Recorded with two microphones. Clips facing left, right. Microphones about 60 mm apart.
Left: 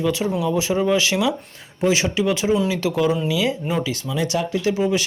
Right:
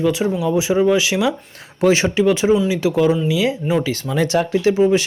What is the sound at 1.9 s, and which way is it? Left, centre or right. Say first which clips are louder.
Speech: right 4 dB; right.